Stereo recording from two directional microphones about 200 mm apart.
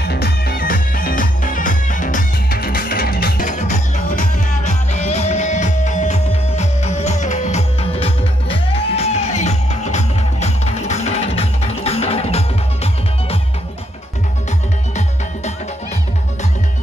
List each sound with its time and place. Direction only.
0.0 s music: 55° left (ahead or behind); by 13.4 s 30° left (ahead or behind)